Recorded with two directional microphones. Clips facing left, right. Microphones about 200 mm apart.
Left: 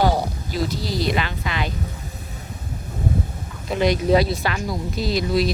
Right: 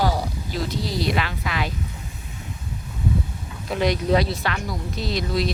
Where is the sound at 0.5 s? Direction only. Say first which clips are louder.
Left 2 dB; 5° left (ahead or behind).